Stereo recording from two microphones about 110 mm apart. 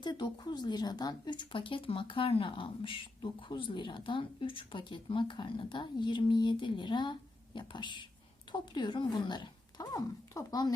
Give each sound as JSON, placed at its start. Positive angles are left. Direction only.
{"t": 0.0, "sound": "speech", "side_deg": 40}